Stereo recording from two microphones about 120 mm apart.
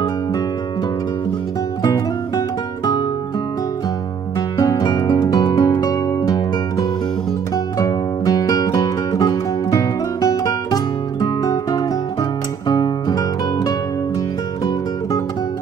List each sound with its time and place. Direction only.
1.8 s music: 35° left (ahead or behind)
4.6 s music: 30° left (ahead or behind)